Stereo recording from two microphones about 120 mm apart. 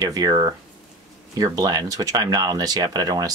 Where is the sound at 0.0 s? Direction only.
30° right (ahead or behind).